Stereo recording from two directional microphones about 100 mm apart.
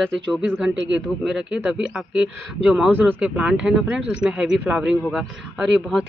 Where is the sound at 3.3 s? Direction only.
10° right (ahead or behind).